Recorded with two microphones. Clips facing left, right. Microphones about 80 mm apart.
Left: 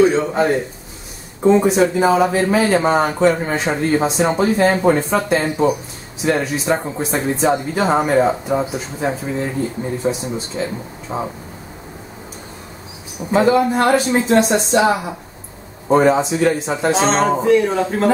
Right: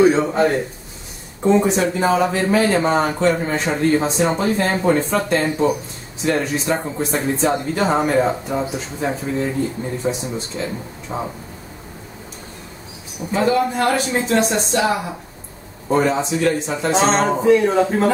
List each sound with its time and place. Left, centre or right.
0.0 s a sound: centre
0.3 s speech: centre
13.5 s speech: left
16.1 s speech: centre
16.9 s speech: centre